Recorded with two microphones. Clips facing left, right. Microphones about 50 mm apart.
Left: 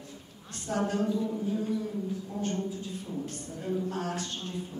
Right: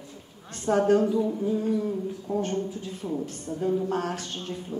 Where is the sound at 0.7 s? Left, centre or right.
Right.